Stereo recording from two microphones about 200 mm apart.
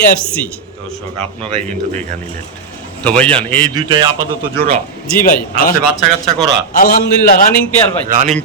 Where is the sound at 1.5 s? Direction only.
35° right (ahead or behind).